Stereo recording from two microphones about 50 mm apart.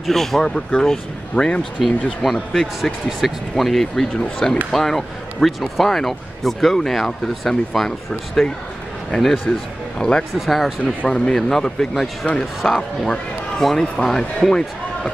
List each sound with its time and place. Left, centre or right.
0.0 s speech: centre
2.2 s speech: centre
9.9 s speech: centre
10.3 s speech: centre
11.1 s speech: centre